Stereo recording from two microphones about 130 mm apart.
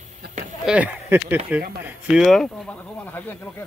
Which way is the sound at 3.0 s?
15° left (ahead or behind).